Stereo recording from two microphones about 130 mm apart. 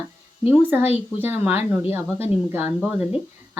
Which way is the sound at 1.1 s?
15° right (ahead or behind).